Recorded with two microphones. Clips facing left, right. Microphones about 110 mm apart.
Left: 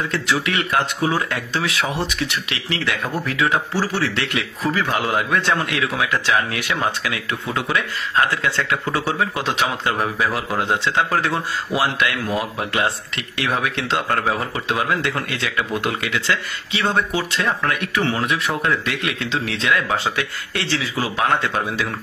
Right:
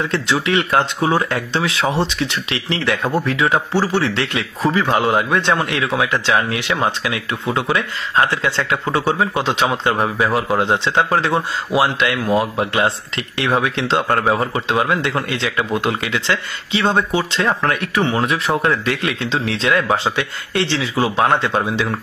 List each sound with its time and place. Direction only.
0.1 s speech: 30° right (ahead or behind)